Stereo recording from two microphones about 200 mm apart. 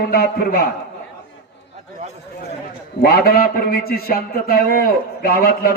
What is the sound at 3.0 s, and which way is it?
A man's voice, 50° left (ahead or behind).